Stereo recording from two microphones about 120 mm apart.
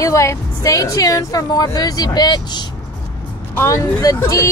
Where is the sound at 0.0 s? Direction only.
25° left (ahead or behind).